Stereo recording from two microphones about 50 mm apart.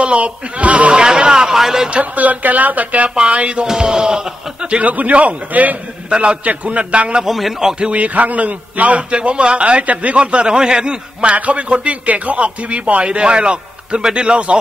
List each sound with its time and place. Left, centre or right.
0.0 s a man's voice: right
1.0 s speech: centre
1.9 s a man's voice: right
7.2 s a man's voice: centre
7.8 s a man's voice: right